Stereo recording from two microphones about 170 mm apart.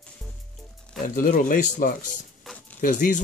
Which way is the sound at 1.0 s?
50° left (ahead or behind).